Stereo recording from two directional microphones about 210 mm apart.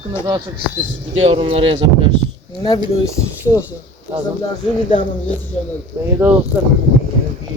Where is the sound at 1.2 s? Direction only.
25° right (ahead or behind).